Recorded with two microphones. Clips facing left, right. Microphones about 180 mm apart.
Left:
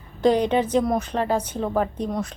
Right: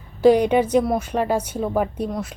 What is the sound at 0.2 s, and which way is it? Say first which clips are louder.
A woman's voice: right 4 dB; 10° right (ahead or behind).